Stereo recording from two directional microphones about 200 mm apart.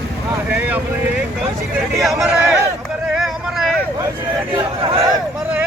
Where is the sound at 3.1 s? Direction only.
Centre (ahead or behind).